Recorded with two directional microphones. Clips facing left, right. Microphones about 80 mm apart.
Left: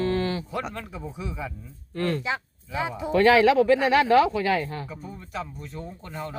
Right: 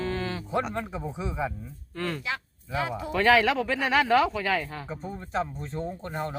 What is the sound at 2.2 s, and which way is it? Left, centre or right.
Speech, left.